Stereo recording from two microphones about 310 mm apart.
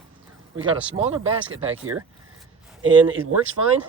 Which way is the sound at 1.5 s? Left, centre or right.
Right.